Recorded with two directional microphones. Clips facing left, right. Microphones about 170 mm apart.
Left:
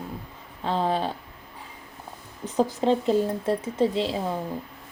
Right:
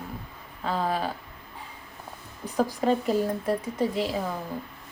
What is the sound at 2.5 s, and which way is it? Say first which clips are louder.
A woman's voice: left 2 dB; 25° left (ahead or behind).